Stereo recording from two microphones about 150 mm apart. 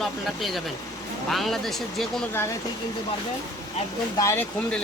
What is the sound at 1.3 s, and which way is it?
Speech, centre (ahead or behind).